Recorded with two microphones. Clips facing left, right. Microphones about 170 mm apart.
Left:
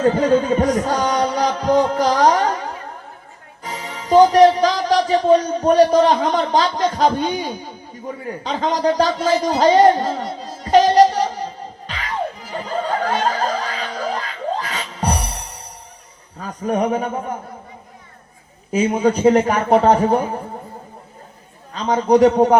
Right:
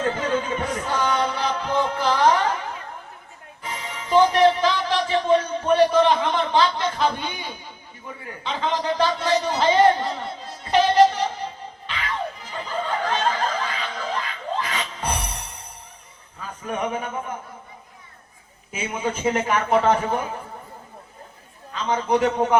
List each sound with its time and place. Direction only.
0.0 s a sound: 40° left (ahead or behind)
3.6 s music: 35° left (ahead or behind)
16.4 s a man's voice: 40° left (ahead or behind)
18.7 s a man's voice: 40° left (ahead or behind)
21.7 s a man's voice: 35° left (ahead or behind)